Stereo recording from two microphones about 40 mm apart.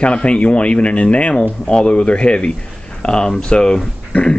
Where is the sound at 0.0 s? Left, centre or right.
Left.